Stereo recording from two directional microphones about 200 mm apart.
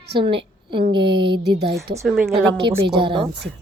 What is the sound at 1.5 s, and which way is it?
Speech, 55° right (ahead or behind).